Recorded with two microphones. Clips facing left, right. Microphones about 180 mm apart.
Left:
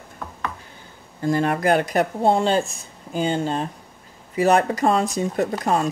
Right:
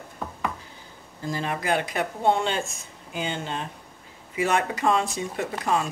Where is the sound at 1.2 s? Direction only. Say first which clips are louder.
Left 9 dB; 55° left (ahead or behind).